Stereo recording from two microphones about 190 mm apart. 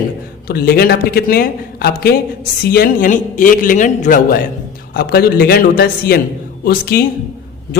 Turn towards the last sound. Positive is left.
turn(degrees=55)  # may be behind; listen again after turning